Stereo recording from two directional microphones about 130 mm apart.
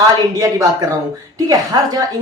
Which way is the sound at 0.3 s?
25° right (ahead or behind).